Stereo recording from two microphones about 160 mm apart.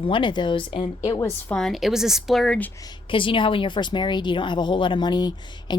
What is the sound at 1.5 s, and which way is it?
A woman's voice, centre (ahead or behind).